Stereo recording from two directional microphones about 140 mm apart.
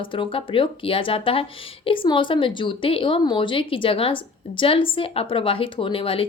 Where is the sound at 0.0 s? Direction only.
35° left (ahead or behind).